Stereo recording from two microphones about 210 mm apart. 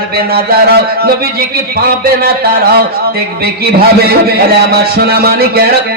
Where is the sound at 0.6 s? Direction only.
45° right (ahead or behind).